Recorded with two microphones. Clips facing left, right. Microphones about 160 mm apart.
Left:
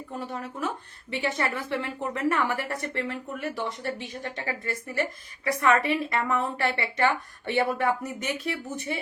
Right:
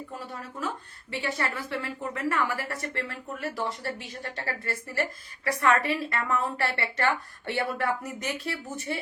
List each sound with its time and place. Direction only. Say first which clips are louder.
1.1 s a woman's voice: left 3 dB; 20° left (ahead or behind)